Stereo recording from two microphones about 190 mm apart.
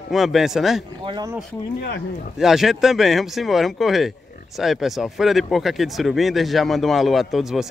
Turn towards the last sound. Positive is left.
turn(degrees=0)  # may be behind; listen again after turning